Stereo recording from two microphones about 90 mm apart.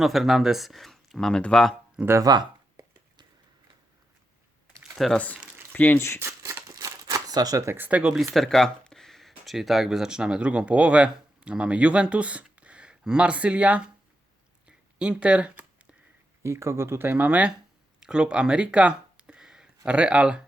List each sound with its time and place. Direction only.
0.0 s speech: centre (ahead or behind)
2.2 s speech: 50° right (ahead or behind)
5.1 s speech: 15° left (ahead or behind)
6.0 s speech: 30° left (ahead or behind)
6.2 s crumpling: 30° right (ahead or behind)
6.7 s crumpling: 45° right (ahead or behind)
7.8 s speech: 15° right (ahead or behind)
8.1 s speech: centre (ahead or behind)
14.7 s a sound: 10° right (ahead or behind)
16.4 s speech: 30° right (ahead or behind); by 20.4 s 10° right (ahead or behind)